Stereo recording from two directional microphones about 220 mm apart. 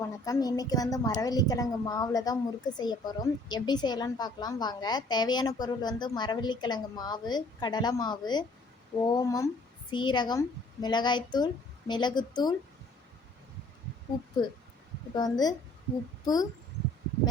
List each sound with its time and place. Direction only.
0.0 s a woman's voice: 15° left (ahead or behind)
14.4 s a woman's voice: 20° left (ahead or behind)